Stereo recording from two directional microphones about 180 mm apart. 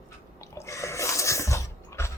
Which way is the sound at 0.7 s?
15° left (ahead or behind).